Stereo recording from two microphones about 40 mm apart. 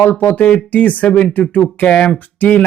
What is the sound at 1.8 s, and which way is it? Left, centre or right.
Speech, left.